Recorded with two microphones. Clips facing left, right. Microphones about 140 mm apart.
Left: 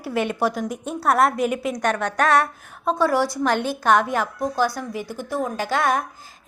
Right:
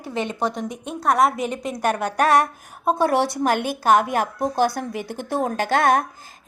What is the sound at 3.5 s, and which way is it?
Speech, 10° right (ahead or behind).